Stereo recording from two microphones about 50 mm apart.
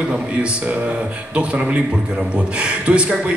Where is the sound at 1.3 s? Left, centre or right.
Right.